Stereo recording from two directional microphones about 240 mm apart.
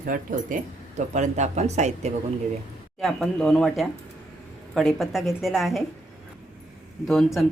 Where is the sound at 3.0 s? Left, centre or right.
Centre.